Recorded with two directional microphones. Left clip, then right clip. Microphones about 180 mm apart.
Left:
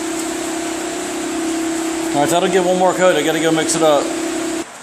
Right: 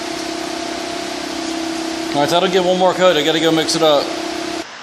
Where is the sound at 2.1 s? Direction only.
Centre (ahead or behind).